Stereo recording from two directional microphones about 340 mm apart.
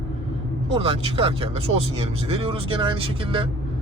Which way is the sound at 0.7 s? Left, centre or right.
Centre.